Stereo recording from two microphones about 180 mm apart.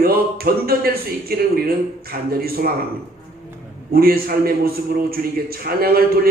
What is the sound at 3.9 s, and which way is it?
A man's voice, 55° right (ahead or behind).